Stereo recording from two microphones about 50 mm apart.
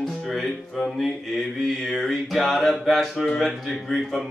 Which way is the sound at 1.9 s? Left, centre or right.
Centre.